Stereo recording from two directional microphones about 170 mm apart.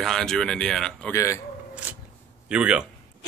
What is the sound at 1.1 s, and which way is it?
Speech, 15° left (ahead or behind).